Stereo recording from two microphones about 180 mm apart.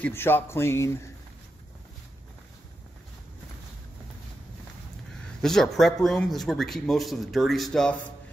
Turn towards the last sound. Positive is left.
turn(degrees=5)  # may be behind; listen again after turning